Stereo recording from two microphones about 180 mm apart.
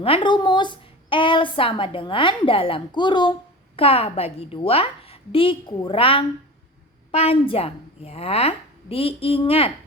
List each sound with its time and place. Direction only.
0.0 s a woman's voice: 30° left (ahead or behind)